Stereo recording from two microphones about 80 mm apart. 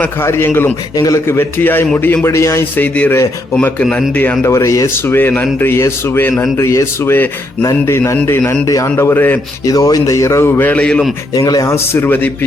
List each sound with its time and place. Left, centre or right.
0.2 s speech: left
0.9 s speech: left
1.3 s a man's voice: left
2.7 s a man's voice: centre
4.4 s a man's voice: left
5.0 s a man's voice: left
9.1 s speech: left
9.6 s speech: left
10.6 s speech: left
11.3 s speech: left
11.6 s a man's voice: left
12.0 s speech: left